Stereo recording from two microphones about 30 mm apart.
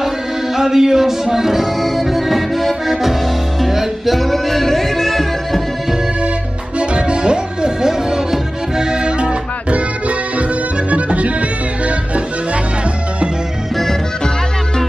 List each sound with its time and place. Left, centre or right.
0.6 s music: centre
6.8 s music: right
10.9 s music: right